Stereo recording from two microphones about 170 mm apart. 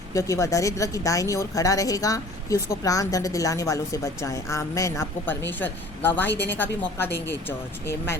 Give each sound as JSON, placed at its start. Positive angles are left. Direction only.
{"t": 0.1, "sound": "a woman's voice", "side_deg": 20}